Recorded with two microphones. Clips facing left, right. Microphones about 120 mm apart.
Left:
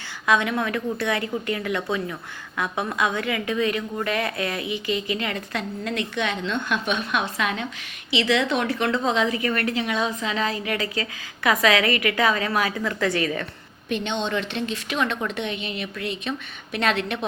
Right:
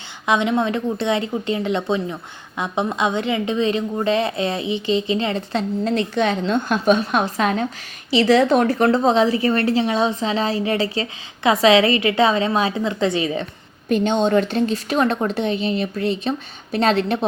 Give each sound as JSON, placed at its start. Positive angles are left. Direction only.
{"t": 0.3, "sound": "a woman's voice", "side_deg": -20}
{"t": 13.8, "sound": "a woman's voice", "side_deg": -40}